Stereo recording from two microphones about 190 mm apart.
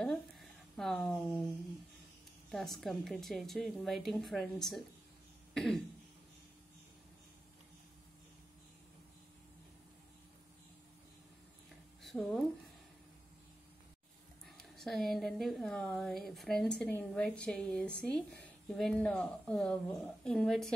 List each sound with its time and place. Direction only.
0.0 s a sound: centre (ahead or behind)
2.5 s a woman's voice: centre (ahead or behind)
5.5 s throat clearing: centre (ahead or behind)
12.0 s speech: centre (ahead or behind)
14.6 s a woman's voice: centre (ahead or behind)